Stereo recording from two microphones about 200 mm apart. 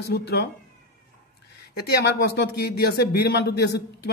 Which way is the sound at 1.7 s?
55° left (ahead or behind).